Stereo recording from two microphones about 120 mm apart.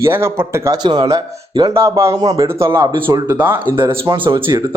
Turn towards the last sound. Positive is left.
turn(degrees=-35)  # may be behind; listen again after turning